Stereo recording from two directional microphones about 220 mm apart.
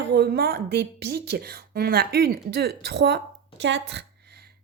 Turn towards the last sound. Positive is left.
turn(degrees=-55)  # may be behind; listen again after turning